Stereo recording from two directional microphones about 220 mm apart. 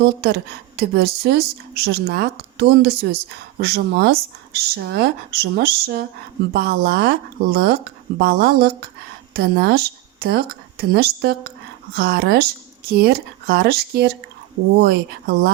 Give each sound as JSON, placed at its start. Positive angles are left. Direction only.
{"t": 0.0, "sound": "speech", "side_deg": -45}